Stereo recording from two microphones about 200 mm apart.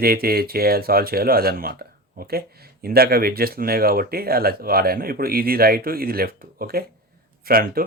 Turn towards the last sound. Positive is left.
turn(degrees=-45)  # may be behind; listen again after turning